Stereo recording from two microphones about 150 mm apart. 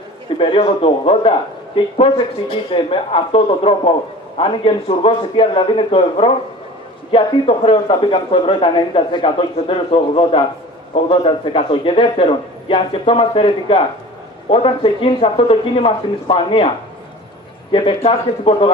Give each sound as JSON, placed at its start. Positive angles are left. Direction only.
{"t": 0.4, "sound": "speech", "side_deg": 35}